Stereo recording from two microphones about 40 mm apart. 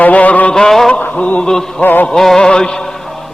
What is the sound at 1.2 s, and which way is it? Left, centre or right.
Speech, left.